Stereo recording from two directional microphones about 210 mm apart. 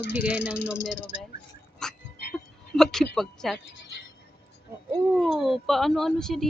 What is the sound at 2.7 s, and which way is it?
Speech, centre (ahead or behind).